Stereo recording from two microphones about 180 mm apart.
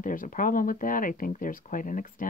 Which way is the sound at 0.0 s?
50° left (ahead or behind).